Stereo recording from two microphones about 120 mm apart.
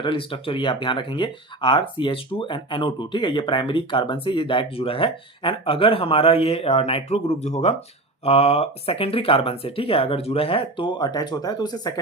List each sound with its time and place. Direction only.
0.0 s speech: 45° left (ahead or behind); by 7.8 s 65° left (ahead or behind)
8.2 s speech: 55° left (ahead or behind); by 11.9 s 35° left (ahead or behind)